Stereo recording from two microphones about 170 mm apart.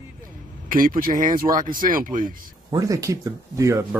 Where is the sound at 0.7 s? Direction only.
55° right (ahead or behind).